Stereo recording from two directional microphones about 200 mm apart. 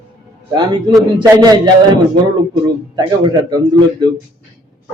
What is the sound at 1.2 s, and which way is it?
Speech, 20° right (ahead or behind).